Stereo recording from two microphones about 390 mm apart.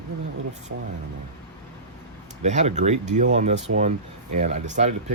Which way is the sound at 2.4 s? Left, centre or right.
Centre.